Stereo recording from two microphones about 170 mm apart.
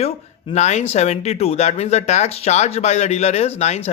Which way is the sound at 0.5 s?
40° left (ahead or behind).